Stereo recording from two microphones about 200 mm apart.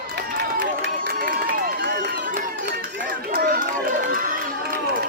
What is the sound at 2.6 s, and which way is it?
Run, 55° right (ahead or behind).